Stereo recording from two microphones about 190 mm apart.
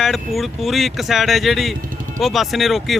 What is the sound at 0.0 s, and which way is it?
Speech, centre (ahead or behind).